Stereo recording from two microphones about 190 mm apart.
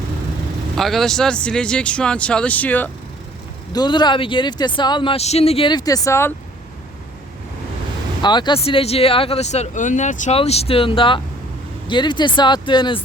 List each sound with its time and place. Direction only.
0.8 s speech: centre (ahead or behind)
3.7 s speech: 20° left (ahead or behind)
8.2 s speech: 25° left (ahead or behind)